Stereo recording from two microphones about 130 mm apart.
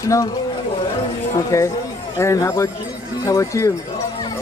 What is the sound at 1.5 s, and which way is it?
Speech, 25° left (ahead or behind).